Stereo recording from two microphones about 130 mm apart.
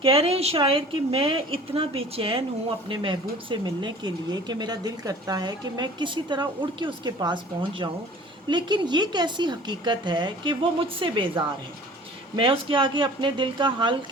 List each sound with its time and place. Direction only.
0.0 s a woman's voice: 45° right (ahead or behind)